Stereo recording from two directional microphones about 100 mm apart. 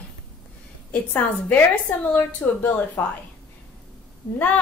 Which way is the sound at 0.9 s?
15° left (ahead or behind).